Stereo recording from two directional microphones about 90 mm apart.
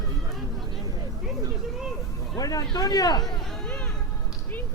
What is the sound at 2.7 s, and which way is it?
Speech, 45° left (ahead or behind).